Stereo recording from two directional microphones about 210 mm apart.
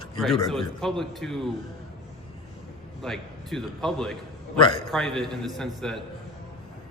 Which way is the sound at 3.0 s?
Centre (ahead or behind).